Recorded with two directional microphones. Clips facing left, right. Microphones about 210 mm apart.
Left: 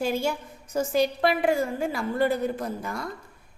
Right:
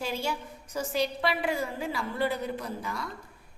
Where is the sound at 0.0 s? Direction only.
50° left (ahead or behind).